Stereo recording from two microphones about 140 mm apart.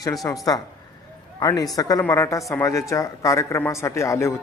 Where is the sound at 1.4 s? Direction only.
25° left (ahead or behind).